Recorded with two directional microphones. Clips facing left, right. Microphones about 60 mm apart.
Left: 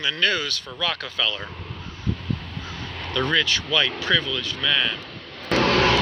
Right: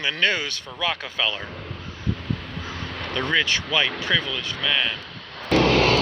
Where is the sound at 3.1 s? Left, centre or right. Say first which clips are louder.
Even; right.